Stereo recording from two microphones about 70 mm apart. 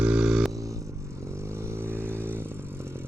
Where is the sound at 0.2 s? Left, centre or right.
Centre.